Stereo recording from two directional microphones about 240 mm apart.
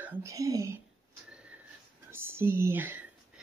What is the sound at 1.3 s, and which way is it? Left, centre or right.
Sniff, centre.